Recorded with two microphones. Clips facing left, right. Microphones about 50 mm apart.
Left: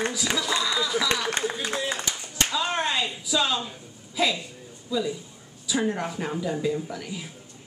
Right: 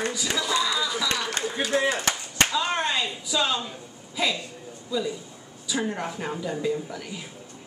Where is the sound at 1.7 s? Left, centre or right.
Right.